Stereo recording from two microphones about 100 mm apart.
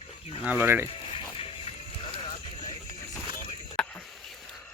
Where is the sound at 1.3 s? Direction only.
70° left (ahead or behind).